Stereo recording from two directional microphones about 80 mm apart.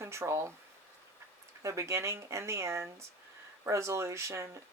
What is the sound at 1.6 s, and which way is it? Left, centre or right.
Speech, right.